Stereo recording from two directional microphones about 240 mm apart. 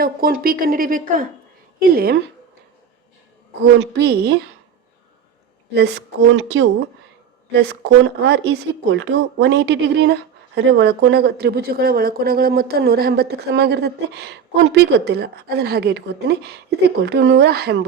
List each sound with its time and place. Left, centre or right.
0.0 s a woman's voice: right
3.8 s speech: right
5.7 s speech: right